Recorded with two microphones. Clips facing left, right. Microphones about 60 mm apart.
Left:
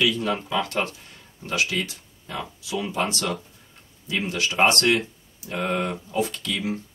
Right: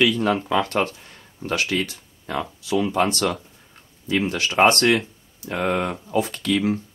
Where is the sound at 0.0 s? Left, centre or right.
Right.